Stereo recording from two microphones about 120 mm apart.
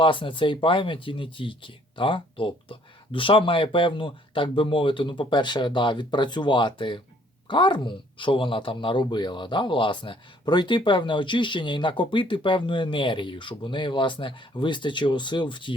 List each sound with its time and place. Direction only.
0.0 s speech: 45° left (ahead or behind)